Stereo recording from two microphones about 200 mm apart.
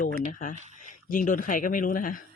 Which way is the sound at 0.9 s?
40° left (ahead or behind).